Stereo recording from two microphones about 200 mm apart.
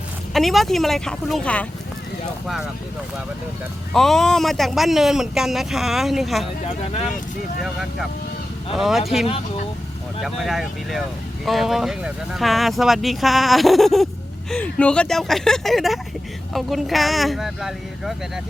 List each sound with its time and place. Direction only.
0.3 s speech: centre (ahead or behind)
3.9 s speech: centre (ahead or behind)
6.7 s speech: 30° left (ahead or behind)
7.6 s speech: centre (ahead or behind)